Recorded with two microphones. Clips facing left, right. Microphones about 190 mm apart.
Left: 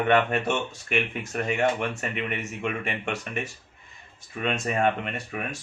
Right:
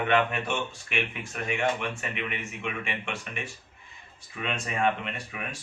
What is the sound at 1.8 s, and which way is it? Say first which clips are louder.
Speech: left 4 dB; 45° left (ahead or behind).